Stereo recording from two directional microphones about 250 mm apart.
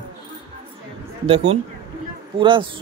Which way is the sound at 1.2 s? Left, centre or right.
Right.